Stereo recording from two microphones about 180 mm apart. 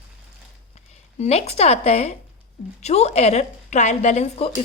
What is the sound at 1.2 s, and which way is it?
A woman's voice, 35° left (ahead or behind).